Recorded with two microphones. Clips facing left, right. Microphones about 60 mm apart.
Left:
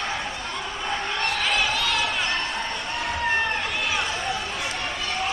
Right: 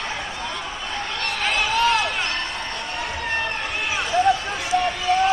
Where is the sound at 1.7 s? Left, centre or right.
Right.